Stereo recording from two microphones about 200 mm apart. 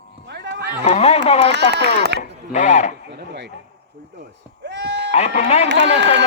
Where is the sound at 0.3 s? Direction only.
55° right (ahead or behind).